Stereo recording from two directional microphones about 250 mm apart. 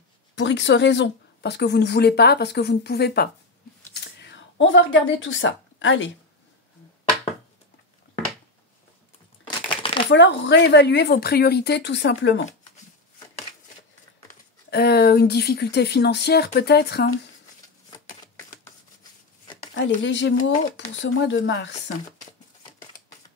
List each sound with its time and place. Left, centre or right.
0.4 s speech: left
3.9 s a sound: left
9.7 s shuffling cards: centre
10.1 s speech: left
14.2 s speech: left
20.0 s speech: left